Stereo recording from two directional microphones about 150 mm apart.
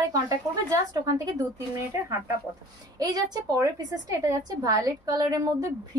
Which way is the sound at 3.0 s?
25° right (ahead or behind).